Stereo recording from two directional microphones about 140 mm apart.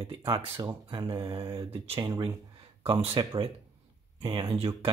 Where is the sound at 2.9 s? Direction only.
45° right (ahead or behind).